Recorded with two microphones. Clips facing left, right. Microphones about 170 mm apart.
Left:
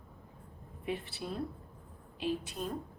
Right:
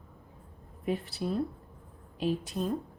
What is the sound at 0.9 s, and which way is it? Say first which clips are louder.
A woman's voice: right 6 dB; 40° right (ahead or behind).